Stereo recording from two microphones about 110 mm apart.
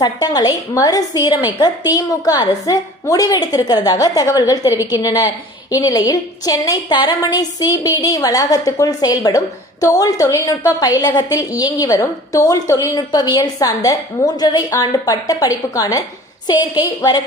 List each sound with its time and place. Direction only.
0.0 s a woman's voice: 35° left (ahead or behind)